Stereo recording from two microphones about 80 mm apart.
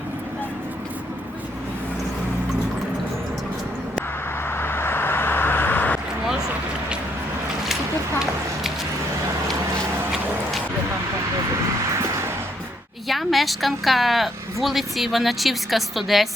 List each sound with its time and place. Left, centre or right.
4.4 s vehicle: left
13.1 s speech: centre